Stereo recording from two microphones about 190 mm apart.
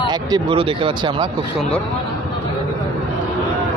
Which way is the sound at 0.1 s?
25° right (ahead or behind).